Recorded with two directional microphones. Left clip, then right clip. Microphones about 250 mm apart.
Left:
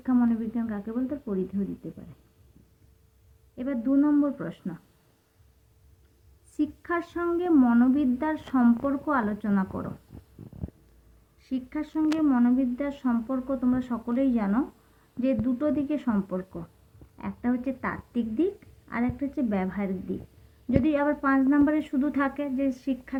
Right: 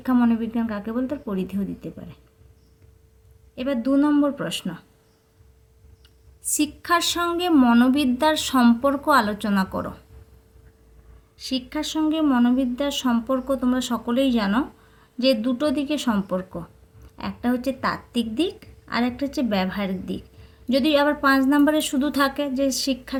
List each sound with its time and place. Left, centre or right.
0.0 s a woman's voice: right
3.5 s speech: right
6.6 s speech: right
11.3 s speech: right